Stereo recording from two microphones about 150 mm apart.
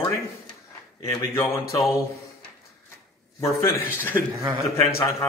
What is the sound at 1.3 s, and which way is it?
Speech, 20° left (ahead or behind).